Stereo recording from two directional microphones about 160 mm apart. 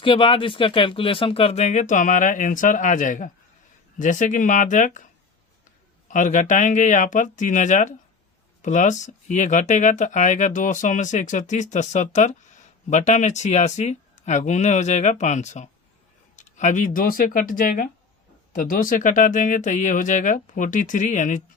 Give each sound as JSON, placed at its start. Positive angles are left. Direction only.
{"t": 0.0, "sound": "speech", "side_deg": 30}
{"t": 6.1, "sound": "speech", "side_deg": 55}